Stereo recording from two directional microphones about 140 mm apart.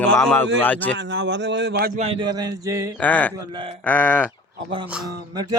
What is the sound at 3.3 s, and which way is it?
Speech, 35° right (ahead or behind).